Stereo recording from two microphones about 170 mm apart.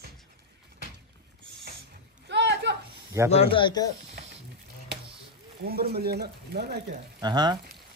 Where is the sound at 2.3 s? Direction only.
90° right.